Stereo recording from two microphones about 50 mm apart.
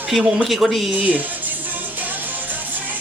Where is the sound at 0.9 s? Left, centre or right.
Right.